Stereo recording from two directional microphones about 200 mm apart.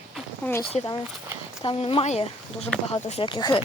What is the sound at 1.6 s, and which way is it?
Speech, 25° left (ahead or behind).